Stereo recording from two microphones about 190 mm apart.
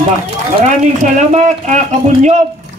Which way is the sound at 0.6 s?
40° right (ahead or behind).